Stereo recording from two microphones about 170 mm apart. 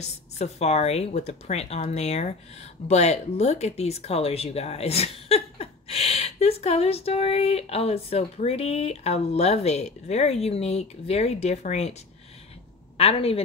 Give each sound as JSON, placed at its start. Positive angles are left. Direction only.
{"t": 0.4, "sound": "speech", "side_deg": 40}
{"t": 12.9, "sound": "a woman's voice", "side_deg": 35}